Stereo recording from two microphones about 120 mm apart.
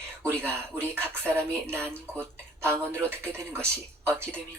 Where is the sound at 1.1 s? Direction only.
20° right (ahead or behind).